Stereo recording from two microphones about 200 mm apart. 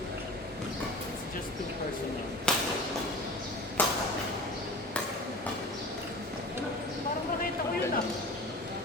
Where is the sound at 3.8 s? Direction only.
10° left (ahead or behind).